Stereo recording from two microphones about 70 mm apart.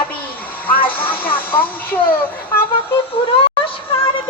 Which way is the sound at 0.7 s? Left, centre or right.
Left.